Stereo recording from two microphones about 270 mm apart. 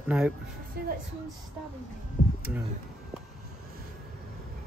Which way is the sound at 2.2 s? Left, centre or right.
Left.